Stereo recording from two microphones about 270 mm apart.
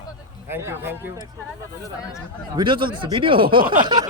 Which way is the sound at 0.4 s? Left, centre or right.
Centre.